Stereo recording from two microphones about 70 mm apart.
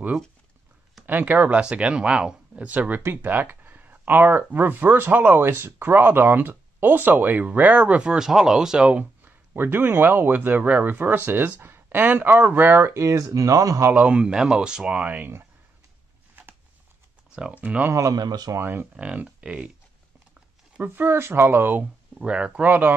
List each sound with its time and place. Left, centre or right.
1.0 s speech: right
3.0 s speech: right
8.0 s speech: centre
9.2 s speech: right
12.9 s speech: right
13.9 s speech: centre
17.4 s speech: right
17.9 s speech: right
18.2 s speech: right
18.6 s speech: right
18.9 s speech: centre
20.7 s speech: right
22.2 s speech: centre